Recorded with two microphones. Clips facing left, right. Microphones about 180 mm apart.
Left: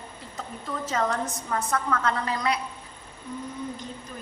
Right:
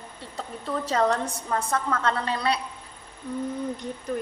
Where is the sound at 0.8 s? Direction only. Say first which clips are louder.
Right 3 dB; 35° right (ahead or behind).